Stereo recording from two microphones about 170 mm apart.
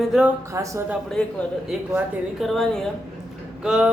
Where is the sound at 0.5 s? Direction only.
20° right (ahead or behind).